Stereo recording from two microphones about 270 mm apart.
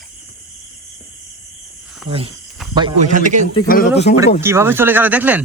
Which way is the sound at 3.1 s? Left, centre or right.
Right.